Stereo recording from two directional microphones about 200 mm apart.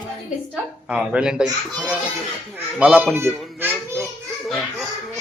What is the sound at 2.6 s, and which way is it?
Speech, 5° right (ahead or behind).